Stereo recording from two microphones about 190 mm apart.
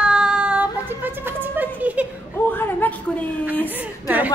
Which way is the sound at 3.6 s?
10° right (ahead or behind).